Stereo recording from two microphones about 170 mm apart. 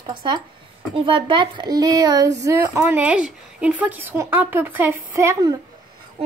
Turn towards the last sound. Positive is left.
turn(degrees=-15)  # may be behind; listen again after turning